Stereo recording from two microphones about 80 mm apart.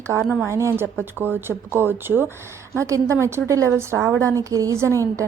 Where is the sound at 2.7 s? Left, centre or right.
Right.